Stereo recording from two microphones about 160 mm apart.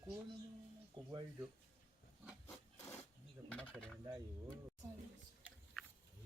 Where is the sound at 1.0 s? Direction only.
35° right (ahead or behind).